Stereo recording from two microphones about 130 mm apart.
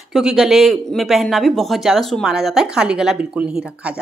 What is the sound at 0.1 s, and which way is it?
Speech, 5° right (ahead or behind).